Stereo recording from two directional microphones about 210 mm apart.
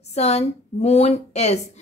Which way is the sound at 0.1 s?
30° left (ahead or behind).